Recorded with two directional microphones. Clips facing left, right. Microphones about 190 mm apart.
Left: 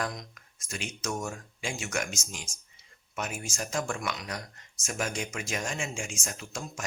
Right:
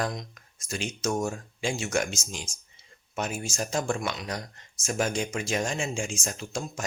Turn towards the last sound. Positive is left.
turn(degrees=-30)  # may be behind; listen again after turning